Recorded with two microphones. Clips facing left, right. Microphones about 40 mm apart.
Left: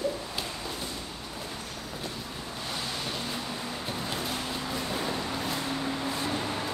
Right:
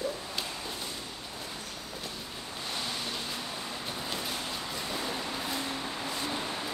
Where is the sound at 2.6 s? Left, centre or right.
Centre.